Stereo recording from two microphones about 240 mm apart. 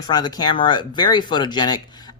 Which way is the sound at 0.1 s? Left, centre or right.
Centre.